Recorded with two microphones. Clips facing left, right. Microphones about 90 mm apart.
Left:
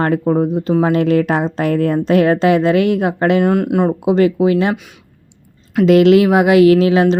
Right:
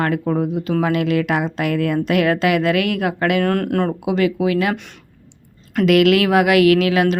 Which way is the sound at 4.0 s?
35° left (ahead or behind).